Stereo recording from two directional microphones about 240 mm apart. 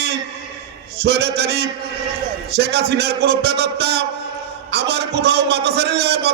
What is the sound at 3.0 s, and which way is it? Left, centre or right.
A man's voice, right.